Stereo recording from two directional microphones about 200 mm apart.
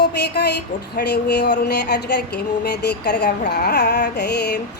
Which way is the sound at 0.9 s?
55° left (ahead or behind).